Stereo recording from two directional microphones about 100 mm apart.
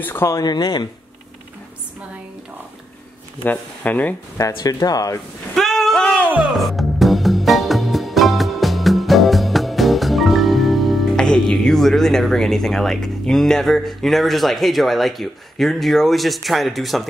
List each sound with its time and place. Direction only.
0.0 s speech: 25° left (ahead or behind)
0.4 s speech: 40° left (ahead or behind)
3.4 s speech: 15° left (ahead or behind)
4.4 s speech: 35° left (ahead or behind)
5.5 s a sound: 5° left (ahead or behind)
6.3 s music: centre (ahead or behind)